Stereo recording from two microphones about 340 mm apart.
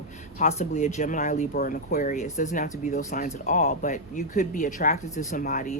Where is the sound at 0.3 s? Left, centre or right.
Left.